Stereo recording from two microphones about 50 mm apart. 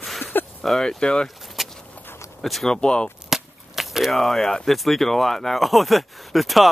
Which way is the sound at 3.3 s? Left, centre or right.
Centre.